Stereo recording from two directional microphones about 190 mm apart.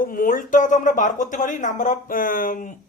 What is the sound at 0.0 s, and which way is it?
Speech, 45° left (ahead or behind).